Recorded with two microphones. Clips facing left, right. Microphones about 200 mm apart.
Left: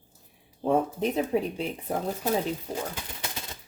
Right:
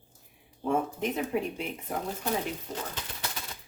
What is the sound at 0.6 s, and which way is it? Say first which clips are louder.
Speech: left 4 dB; 35° left (ahead or behind).